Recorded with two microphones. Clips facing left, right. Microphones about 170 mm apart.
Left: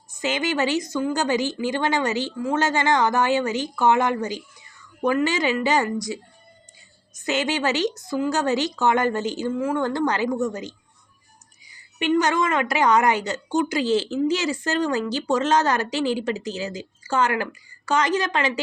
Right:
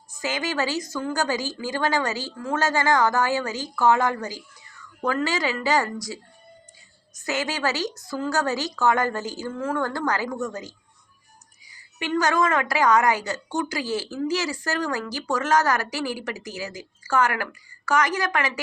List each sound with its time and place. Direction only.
0.2 s a woman's voice: 20° left (ahead or behind)
7.2 s a woman's voice: 20° left (ahead or behind)